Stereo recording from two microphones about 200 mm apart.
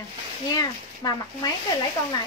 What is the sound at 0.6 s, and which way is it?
Speech, 20° left (ahead or behind).